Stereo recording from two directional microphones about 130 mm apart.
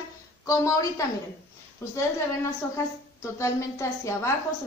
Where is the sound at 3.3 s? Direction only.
20° left (ahead or behind).